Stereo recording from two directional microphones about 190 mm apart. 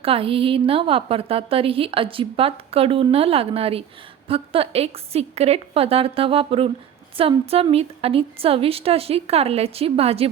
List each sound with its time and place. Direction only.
0.0 s a woman's voice: 30° right (ahead or behind)